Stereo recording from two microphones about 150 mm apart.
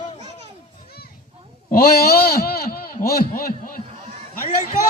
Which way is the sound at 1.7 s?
90° left.